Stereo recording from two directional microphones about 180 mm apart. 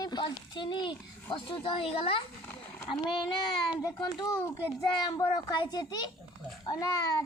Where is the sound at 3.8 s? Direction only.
20° left (ahead or behind).